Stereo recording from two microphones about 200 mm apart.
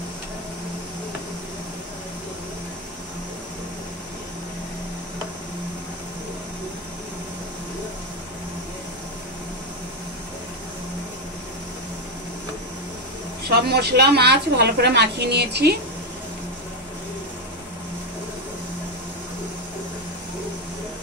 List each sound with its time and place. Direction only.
13.4 s a woman's voice: 50° right (ahead or behind)